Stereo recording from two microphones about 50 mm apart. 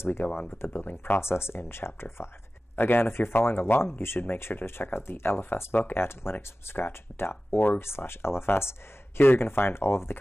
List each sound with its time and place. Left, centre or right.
0.0 s speech: left